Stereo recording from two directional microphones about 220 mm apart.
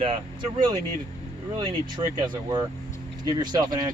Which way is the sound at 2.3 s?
20° right (ahead or behind).